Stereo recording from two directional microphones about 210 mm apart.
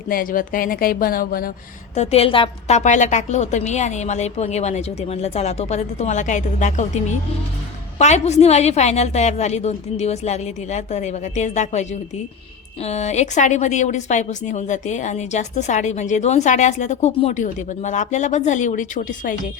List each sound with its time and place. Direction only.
0.1 s speech: 40° left (ahead or behind)
2.0 s a woman's voice: 30° left (ahead or behind)